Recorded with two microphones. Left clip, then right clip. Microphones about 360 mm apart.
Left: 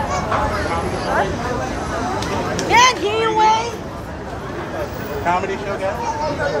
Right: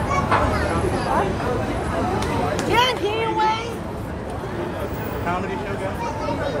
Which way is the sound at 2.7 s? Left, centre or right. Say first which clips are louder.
Left 7 dB; left.